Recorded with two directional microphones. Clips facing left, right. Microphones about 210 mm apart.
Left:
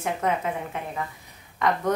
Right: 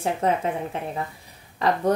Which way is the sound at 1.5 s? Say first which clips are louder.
Right 2 dB; 35° right (ahead or behind).